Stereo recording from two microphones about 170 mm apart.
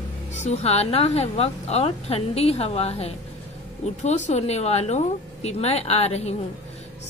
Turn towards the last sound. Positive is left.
turn(degrees=40)  # may be behind; listen again after turning